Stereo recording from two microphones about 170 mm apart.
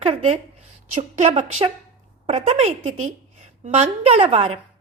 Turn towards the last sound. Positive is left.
turn(degrees=-35)  # may be behind; listen again after turning